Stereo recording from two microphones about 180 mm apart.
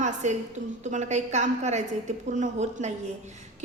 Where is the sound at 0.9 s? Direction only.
40° right (ahead or behind).